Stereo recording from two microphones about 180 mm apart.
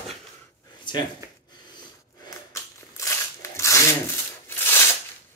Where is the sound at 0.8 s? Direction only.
25° left (ahead or behind).